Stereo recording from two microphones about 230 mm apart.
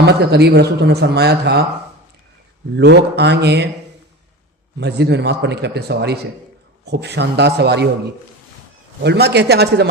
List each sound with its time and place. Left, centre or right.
0.0 s a man's voice: right
2.7 s a man's voice: right
4.8 s a man's voice: right
9.0 s a man's voice: right